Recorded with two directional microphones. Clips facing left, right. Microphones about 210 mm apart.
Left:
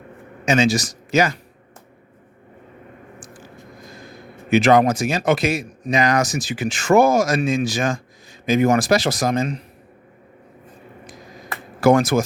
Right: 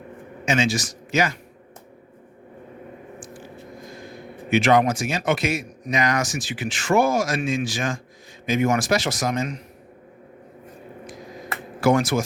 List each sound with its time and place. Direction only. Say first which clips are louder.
0.4 s speech: left 4 dB; 40° left (ahead or behind)
4.4 s speech: left 4 dB; 40° left (ahead or behind)
11.8 s speech: left 4 dB; 45° left (ahead or behind)